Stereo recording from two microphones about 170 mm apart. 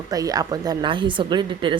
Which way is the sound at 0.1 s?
20° right (ahead or behind).